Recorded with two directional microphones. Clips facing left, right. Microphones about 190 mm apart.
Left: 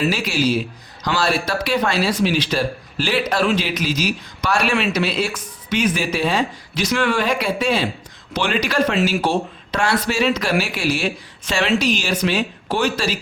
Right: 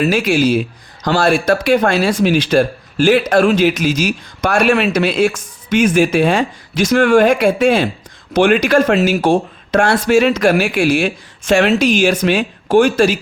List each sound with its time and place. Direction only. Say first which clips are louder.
0.0 s speech: right 6 dB; 50° right (ahead or behind)